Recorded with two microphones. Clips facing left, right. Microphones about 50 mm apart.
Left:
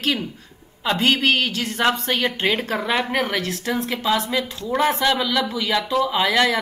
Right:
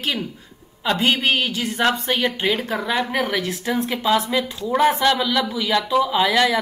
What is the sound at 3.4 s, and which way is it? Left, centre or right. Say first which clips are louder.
A woman's voice: right 1 dB; centre.